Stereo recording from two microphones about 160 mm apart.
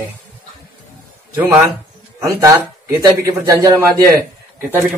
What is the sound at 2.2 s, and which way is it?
A man's voice, 20° right (ahead or behind).